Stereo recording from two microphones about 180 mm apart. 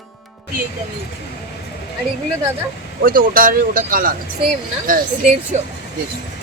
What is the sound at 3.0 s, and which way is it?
Speech, 50° right (ahead or behind).